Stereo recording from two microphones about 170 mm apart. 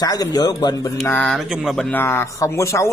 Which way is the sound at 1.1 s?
5° left (ahead or behind).